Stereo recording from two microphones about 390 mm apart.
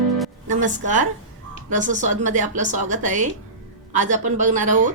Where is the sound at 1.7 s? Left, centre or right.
Centre.